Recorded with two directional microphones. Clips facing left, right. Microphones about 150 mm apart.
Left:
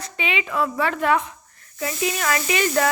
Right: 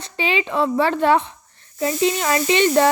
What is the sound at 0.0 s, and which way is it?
A woman's voice, 30° right (ahead or behind).